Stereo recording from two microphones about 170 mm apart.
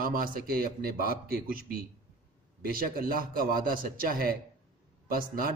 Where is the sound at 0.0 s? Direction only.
55° right (ahead or behind).